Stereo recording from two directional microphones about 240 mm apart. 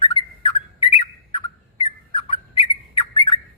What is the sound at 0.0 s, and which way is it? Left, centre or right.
Bird, left.